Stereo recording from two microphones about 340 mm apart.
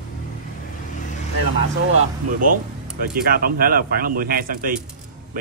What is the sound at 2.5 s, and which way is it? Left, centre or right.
Speech, right.